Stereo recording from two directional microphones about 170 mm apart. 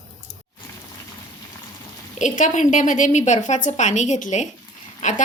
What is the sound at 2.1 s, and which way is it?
A woman's voice, 45° left (ahead or behind).